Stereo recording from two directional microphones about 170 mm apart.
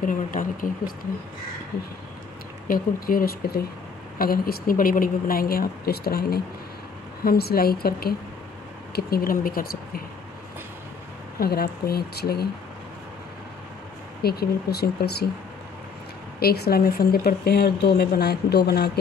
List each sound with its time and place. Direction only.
0.0 s speech: 50° left (ahead or behind)
2.7 s speech: 55° left (ahead or behind)
11.3 s speech: 65° left (ahead or behind)
14.2 s speech: 65° left (ahead or behind)
16.3 s speech: 65° left (ahead or behind)